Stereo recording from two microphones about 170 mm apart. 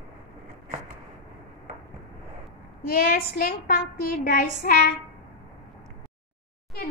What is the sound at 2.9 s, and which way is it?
A woman's voice, 60° left (ahead or behind).